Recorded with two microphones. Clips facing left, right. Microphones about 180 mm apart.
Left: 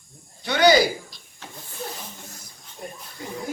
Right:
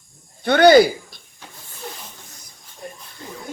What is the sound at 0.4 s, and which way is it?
Speech, 55° right (ahead or behind).